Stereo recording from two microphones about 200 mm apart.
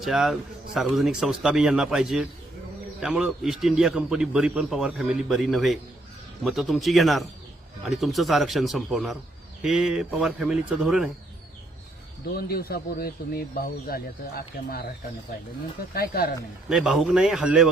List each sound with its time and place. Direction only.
0.0 s a man's voice: centre (ahead or behind)
12.4 s speech: 50° left (ahead or behind)
16.0 s speech: 50° left (ahead or behind)
16.6 s a man's voice: centre (ahead or behind)